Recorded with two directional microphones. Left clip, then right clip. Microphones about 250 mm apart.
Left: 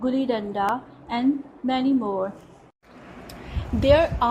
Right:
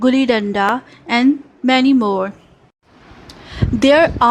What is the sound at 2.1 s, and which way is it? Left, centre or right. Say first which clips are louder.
Speech: right 8 dB; right.